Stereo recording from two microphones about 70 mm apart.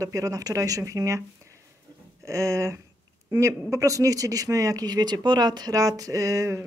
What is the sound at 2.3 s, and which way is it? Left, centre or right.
Speech, right.